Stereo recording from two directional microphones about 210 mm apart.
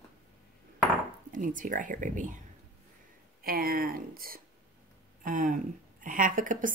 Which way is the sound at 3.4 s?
45° right (ahead or behind).